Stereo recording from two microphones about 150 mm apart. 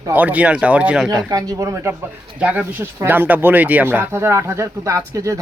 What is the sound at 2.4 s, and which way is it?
Speech, 10° right (ahead or behind).